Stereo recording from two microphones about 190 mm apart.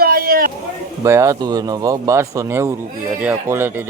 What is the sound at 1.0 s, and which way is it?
Speech, 15° right (ahead or behind).